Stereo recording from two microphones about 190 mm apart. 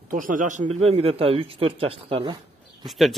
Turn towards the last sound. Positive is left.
turn(degrees=0)  # may be behind; listen again after turning